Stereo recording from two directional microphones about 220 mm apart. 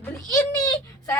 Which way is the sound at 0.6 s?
20° left (ahead or behind).